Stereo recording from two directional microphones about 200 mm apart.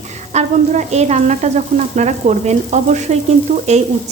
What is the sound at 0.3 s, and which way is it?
Speech, 35° right (ahead or behind).